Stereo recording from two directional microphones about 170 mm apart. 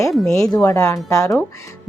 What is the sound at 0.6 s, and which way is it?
Speech, 15° left (ahead or behind).